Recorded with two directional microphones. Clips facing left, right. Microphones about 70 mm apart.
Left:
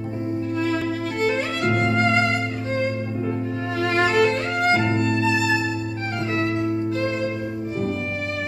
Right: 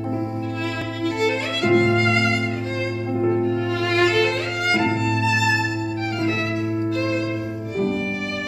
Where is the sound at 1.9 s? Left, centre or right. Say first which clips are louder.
Even; left.